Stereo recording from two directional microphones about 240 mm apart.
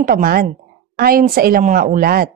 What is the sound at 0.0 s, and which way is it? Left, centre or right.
A woman's voice, right.